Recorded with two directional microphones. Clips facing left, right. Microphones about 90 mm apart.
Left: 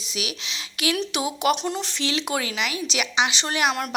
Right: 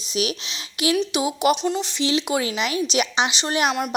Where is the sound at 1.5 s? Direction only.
Centre (ahead or behind).